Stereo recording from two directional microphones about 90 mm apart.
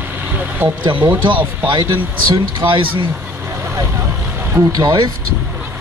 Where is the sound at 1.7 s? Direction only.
60° right (ahead or behind).